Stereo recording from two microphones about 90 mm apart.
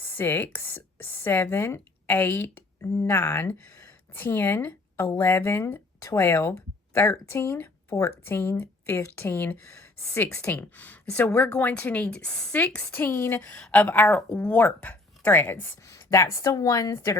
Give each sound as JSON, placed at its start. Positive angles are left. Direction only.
{"t": 0.0, "sound": "a woman's voice", "side_deg": 20}
{"t": 13.6, "sound": "speech", "side_deg": 15}
{"t": 15.9, "sound": "a woman's voice", "side_deg": 35}